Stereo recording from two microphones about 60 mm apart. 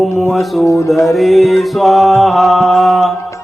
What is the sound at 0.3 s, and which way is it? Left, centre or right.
Music, centre.